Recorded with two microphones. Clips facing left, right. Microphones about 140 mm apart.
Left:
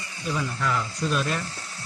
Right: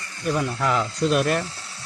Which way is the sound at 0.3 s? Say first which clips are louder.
Right 5 dB; 60° right (ahead or behind).